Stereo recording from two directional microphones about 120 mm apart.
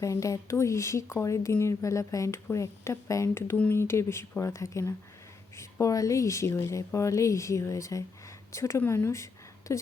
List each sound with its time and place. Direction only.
0.0 s speech: 25° left (ahead or behind)